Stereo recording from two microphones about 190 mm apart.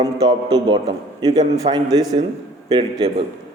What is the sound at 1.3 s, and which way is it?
Speech, 20° right (ahead or behind).